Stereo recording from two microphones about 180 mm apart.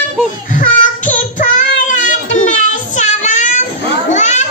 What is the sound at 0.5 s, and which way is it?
Child singing, 45° left (ahead or behind).